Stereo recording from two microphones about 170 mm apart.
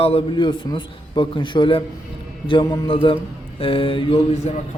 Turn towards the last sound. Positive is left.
turn(degrees=35)  # may be behind; listen again after turning